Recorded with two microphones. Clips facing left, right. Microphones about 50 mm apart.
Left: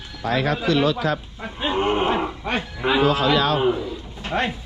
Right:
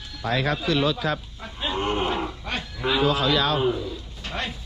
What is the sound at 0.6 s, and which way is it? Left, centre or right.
Speech, left.